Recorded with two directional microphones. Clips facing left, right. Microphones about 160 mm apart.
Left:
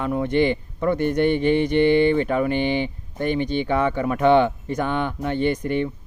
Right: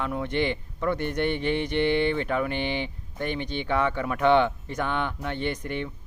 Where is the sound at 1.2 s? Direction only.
45° left (ahead or behind).